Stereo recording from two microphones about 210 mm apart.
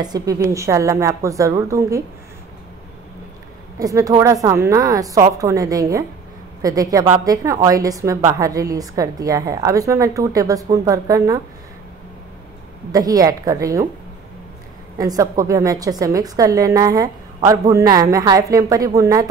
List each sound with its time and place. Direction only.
0.0 s a woman's voice: 15° right (ahead or behind)
3.8 s a woman's voice: 15° right (ahead or behind)
12.9 s a woman's voice: 15° right (ahead or behind)
15.0 s a woman's voice: 15° right (ahead or behind)